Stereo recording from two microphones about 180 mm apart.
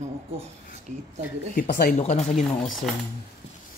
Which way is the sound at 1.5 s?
50° left (ahead or behind).